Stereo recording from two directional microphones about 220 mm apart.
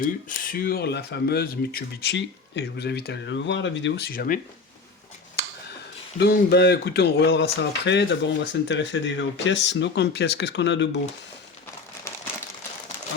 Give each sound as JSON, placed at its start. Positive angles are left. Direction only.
{"t": 0.0, "sound": "speech", "side_deg": 40}
{"t": 6.1, "sound": "speech", "side_deg": 50}